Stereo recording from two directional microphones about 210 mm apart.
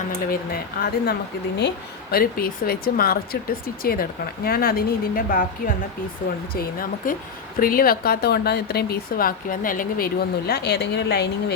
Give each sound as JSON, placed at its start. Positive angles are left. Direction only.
{"t": 0.3, "sound": "speech", "side_deg": 45}
{"t": 4.4, "sound": "speech", "side_deg": 45}